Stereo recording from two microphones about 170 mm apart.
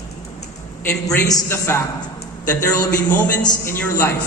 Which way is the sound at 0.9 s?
20° left (ahead or behind).